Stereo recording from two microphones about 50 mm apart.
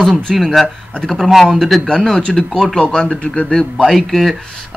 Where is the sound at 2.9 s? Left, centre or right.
Left.